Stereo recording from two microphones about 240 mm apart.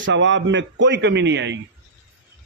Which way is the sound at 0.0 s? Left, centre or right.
Right.